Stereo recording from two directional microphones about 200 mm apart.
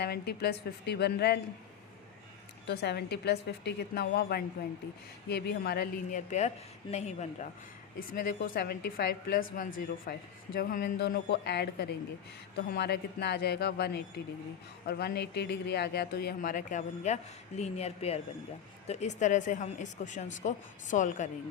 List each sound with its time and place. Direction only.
0.0 s a woman's voice: 55° left (ahead or behind)
2.6 s a woman's voice: 55° left (ahead or behind); by 7.3 s 35° left (ahead or behind)
7.9 s a woman's voice: 45° left (ahead or behind)